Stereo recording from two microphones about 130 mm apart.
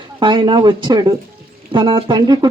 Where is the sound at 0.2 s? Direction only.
35° right (ahead or behind).